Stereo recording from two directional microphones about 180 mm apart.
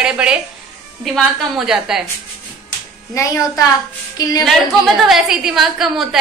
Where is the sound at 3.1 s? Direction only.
20° left (ahead or behind).